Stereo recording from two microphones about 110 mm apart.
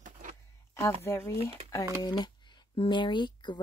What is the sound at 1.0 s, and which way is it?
Speech, 25° left (ahead or behind).